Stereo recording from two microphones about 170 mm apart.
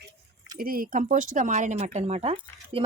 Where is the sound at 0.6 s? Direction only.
55° right (ahead or behind); by 2.4 s 40° right (ahead or behind).